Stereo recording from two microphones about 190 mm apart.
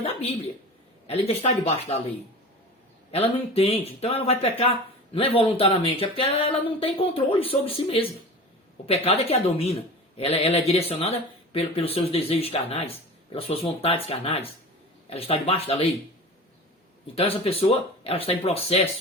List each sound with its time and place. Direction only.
0.0 s a woman's voice: 35° left (ahead or behind)
3.1 s a man's voice: 30° left (ahead or behind)
17.2 s a man's voice: 30° left (ahead or behind)